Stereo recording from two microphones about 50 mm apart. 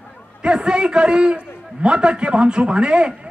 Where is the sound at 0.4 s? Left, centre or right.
Centre.